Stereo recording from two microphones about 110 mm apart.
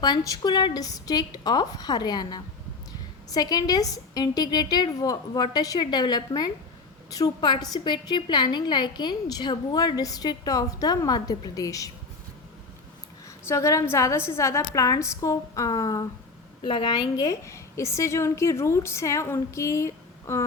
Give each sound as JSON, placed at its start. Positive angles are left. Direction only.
{"t": 0.0, "sound": "a woman's voice", "side_deg": 40}
{"t": 13.2, "sound": "a woman's voice", "side_deg": 30}
{"t": 16.6, "sound": "a woman's voice", "side_deg": 50}